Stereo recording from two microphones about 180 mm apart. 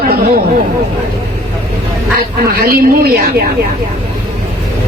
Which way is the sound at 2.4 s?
55° right (ahead or behind).